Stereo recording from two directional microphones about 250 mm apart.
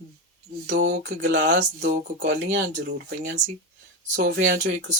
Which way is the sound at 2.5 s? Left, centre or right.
Right.